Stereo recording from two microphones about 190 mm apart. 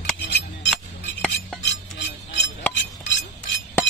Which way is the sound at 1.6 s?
65° left (ahead or behind).